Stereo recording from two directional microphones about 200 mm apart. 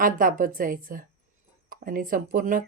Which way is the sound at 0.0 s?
45° right (ahead or behind).